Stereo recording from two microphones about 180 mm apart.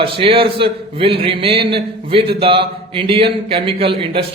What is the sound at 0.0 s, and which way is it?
A man's voice, 30° right (ahead or behind).